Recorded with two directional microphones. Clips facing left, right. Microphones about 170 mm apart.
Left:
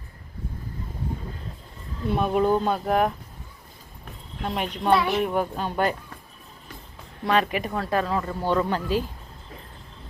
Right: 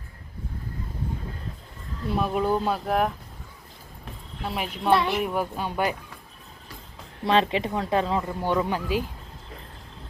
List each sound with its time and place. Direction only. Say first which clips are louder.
2.0 s a woman's voice: left 3 dB; centre (ahead or behind)
4.4 s a woman's voice: left 1 dB; 5° right (ahead or behind)
7.3 s speech: right 1 dB; 25° right (ahead or behind)